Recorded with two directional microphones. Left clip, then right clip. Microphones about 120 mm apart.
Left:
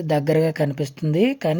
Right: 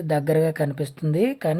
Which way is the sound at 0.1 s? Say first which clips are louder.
Left 1 dB; 30° left (ahead or behind).